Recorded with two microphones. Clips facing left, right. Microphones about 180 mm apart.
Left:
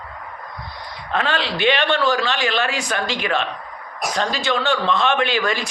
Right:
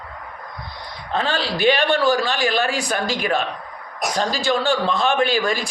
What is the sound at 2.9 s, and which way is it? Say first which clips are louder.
Speech: right 1 dB; 40° right (ahead or behind).